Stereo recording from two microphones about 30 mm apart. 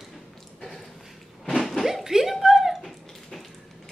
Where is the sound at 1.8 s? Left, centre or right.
Centre.